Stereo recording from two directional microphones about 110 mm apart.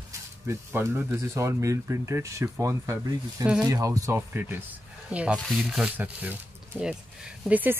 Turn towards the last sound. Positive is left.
turn(degrees=-15)  # may be behind; listen again after turning